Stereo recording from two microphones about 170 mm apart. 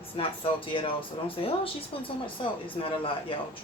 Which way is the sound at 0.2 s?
30° left (ahead or behind).